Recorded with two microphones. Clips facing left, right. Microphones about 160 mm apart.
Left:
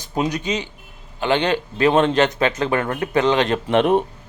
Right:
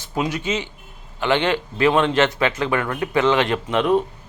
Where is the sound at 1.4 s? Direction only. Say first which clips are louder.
Left 1 dB; 40° left (ahead or behind).